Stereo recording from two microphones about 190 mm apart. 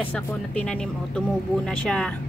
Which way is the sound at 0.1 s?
5° left (ahead or behind).